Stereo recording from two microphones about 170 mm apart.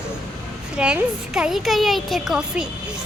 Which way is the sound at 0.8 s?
5° right (ahead or behind).